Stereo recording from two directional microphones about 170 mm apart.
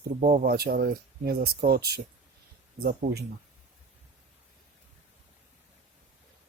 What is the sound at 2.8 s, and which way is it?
Speech, 65° right (ahead or behind).